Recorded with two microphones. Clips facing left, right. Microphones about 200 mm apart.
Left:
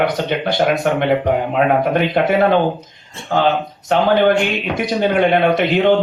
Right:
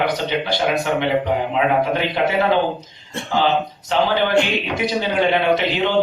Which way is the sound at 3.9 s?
55° left (ahead or behind).